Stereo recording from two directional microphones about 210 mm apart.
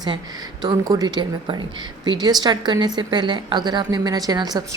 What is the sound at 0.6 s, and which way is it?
A woman's voice, 20° right (ahead or behind).